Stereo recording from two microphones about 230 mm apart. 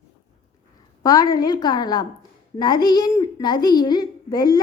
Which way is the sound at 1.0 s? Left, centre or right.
Centre.